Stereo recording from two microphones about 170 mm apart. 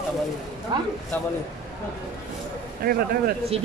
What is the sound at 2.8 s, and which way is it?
Speech, 60° right (ahead or behind).